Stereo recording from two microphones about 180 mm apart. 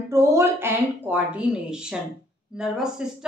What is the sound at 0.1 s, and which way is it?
A woman's voice, 15° right (ahead or behind).